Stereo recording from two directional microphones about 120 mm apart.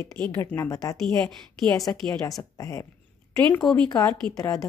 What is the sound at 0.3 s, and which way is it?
Speech, 15° left (ahead or behind).